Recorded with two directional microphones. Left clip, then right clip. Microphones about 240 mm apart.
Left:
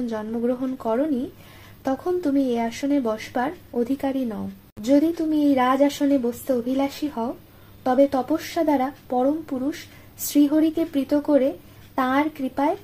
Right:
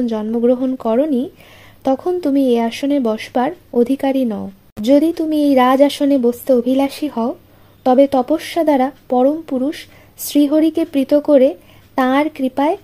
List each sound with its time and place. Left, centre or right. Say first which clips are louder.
0.0 s speech: right 9 dB; right